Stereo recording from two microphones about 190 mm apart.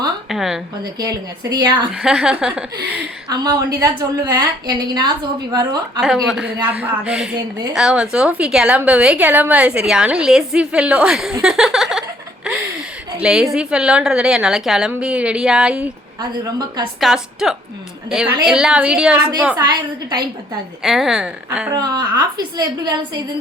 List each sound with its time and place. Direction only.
0.3 s a sound: centre (ahead or behind)
0.9 s a woman's voice: 20° right (ahead or behind)
1.9 s a woman's voice: 5° right (ahead or behind)
3.2 s a woman's voice: 20° right (ahead or behind)
6.0 s a woman's voice: centre (ahead or behind)
11.4 s a sound: 5° right (ahead or behind)
13.1 s a woman's voice: 5° right (ahead or behind)
16.4 s a woman's voice: 20° right (ahead or behind)
17.0 s a woman's voice: centre (ahead or behind)
19.5 s a woman's voice: 20° right (ahead or behind)
20.8 s a woman's voice: centre (ahead or behind)
21.7 s a woman's voice: 20° right (ahead or behind)